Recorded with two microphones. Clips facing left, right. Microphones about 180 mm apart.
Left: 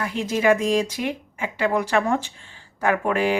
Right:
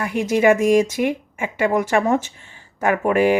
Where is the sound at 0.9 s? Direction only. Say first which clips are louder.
Right 6 dB; 50° right (ahead or behind).